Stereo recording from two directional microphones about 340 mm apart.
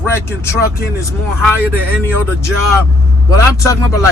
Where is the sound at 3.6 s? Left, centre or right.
Centre.